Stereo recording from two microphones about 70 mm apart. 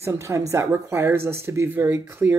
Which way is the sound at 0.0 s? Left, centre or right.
Right.